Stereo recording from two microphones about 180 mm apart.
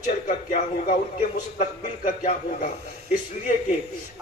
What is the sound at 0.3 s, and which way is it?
A man's voice, 45° left (ahead or behind).